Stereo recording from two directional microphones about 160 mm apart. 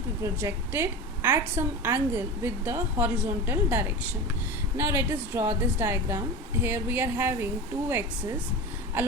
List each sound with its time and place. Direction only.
0.2 s a woman's voice: 15° right (ahead or behind)